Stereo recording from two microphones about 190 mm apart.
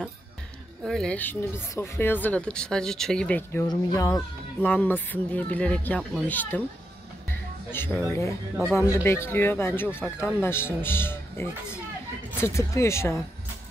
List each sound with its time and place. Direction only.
0.8 s speech: 5° left (ahead or behind)
3.6 s speech: 20° left (ahead or behind)
4.6 s speech: 10° left (ahead or behind)
7.2 s music: 10° left (ahead or behind)
8.1 s speech: 15° left (ahead or behind)